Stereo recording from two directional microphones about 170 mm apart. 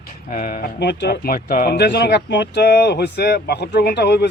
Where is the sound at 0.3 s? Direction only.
55° left (ahead or behind).